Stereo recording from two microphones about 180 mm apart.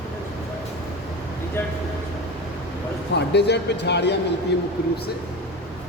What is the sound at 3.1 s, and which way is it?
A man's voice, 70° left (ahead or behind).